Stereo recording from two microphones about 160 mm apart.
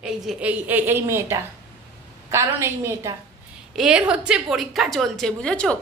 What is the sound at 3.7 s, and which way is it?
A woman's voice, 5° right (ahead or behind).